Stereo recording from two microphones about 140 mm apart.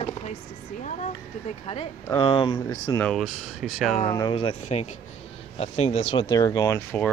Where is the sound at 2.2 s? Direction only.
35° left (ahead or behind).